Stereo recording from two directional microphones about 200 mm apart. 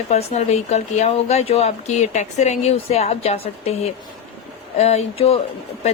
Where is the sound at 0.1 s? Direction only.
30° left (ahead or behind).